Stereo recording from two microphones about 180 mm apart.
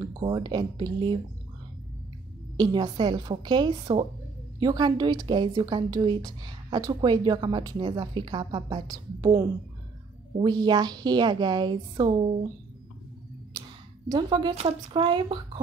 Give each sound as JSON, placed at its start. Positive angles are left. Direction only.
{"t": 0.0, "sound": "a woman's voice", "side_deg": -25}
{"t": 2.5, "sound": "a woman's voice", "side_deg": -25}
{"t": 14.0, "sound": "a woman's voice", "side_deg": -25}
{"t": 14.5, "sound": "a woman's voice", "side_deg": -35}